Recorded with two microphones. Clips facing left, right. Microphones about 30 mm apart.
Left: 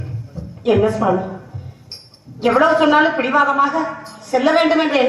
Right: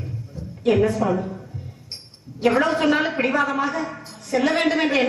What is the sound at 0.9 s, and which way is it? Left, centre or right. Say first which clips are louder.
Speech: left 5 dB; left.